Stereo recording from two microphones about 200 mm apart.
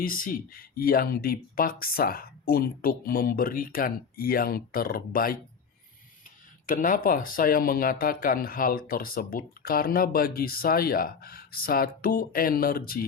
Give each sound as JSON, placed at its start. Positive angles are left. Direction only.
{"t": 0.0, "sound": "speech", "side_deg": 45}
{"t": 6.7, "sound": "speech", "side_deg": 40}